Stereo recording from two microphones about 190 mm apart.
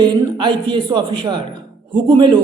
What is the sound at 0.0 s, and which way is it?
A man's voice, 25° right (ahead or behind).